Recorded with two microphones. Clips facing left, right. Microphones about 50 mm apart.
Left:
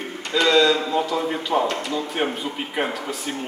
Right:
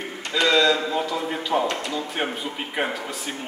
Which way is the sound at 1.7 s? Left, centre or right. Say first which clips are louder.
Left 2 dB; centre.